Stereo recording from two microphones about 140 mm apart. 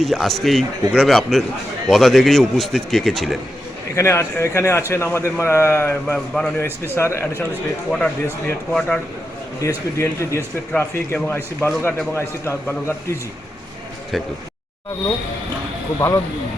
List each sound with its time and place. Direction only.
0.0 s a man's voice: centre (ahead or behind)
3.9 s speech: 20° left (ahead or behind)
6.1 s a man's voice: 5° left (ahead or behind)
6.9 s speech: 20° left (ahead or behind)
7.9 s speech: 5° left (ahead or behind)
9.6 s speech: 20° left (ahead or behind)
16.0 s speech: 20° left (ahead or behind)